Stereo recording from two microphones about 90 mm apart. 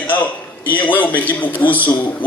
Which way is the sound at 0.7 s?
20° left (ahead or behind).